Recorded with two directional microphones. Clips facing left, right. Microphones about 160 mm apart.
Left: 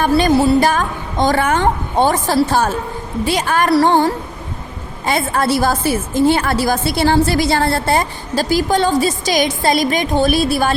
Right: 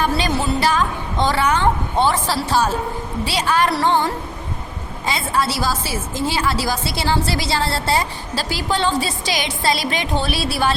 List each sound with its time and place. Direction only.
0.0 s a woman's voice: 45° left (ahead or behind)